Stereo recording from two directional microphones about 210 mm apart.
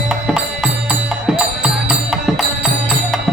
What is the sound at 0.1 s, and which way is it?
Music, 5° right (ahead or behind).